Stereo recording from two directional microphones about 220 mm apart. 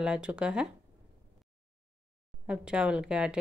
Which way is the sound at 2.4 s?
5° right (ahead or behind).